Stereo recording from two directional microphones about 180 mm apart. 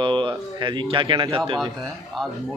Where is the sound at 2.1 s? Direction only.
Centre (ahead or behind).